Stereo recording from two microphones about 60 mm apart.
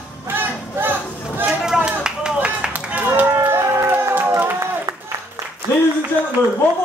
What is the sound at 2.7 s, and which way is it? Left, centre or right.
Run, right.